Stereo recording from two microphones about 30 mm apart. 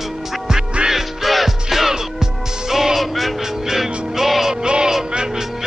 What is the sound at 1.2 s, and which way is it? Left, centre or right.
Music, centre.